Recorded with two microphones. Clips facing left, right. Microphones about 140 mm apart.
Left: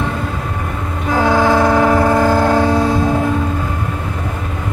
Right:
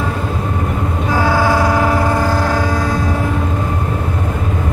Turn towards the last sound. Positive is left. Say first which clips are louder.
# left 4 dB
turn(degrees=25)  # may be behind; listen again after turning